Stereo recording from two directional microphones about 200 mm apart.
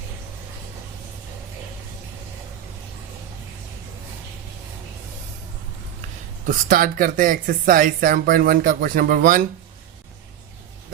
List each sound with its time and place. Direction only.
6.5 s speech: 45° right (ahead or behind)